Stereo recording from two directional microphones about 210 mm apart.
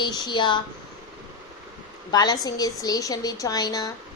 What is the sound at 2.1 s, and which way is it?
A woman's voice, 20° left (ahead or behind).